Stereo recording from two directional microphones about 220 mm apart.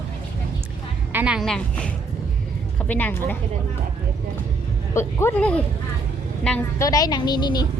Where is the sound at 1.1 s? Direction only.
5° right (ahead or behind).